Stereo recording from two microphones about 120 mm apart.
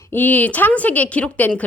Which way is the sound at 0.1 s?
15° left (ahead or behind).